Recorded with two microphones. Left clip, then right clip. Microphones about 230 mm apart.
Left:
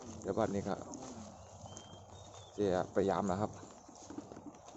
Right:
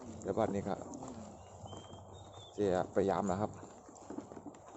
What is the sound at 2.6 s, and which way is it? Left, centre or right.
Speech, centre.